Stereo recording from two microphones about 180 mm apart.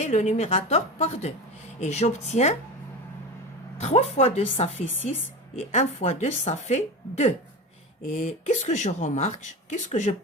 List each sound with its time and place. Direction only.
0.0 s speech: 40° left (ahead or behind)
3.8 s speech: 35° left (ahead or behind)